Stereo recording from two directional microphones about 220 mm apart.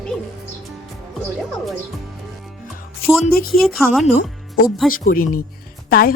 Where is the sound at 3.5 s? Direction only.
Centre (ahead or behind).